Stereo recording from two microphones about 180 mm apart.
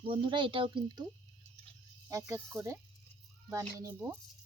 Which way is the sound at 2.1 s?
15° right (ahead or behind).